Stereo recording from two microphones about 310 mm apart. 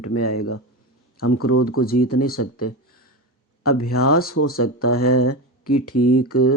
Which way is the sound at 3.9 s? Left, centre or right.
Left.